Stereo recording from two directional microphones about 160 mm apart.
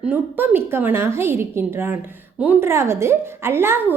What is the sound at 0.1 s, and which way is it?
A woman's voice, 10° right (ahead or behind).